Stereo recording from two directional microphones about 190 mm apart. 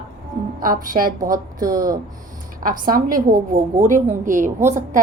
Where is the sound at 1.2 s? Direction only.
20° right (ahead or behind).